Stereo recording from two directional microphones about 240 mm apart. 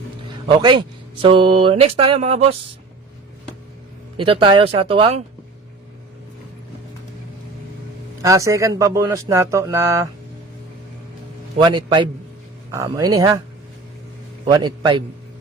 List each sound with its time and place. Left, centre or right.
0.4 s music: centre
4.2 s music: right
8.2 s speech: centre
11.5 s music: centre
12.7 s speech: centre
14.4 s music: centre